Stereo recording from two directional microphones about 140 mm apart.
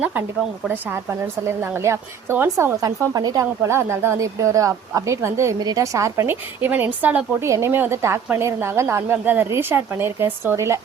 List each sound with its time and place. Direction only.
0.0 s a woman's voice: 10° right (ahead or behind)
2.8 s a woman's voice: 25° right (ahead or behind)